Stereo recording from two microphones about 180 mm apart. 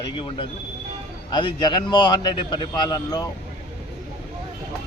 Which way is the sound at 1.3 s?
25° left (ahead or behind).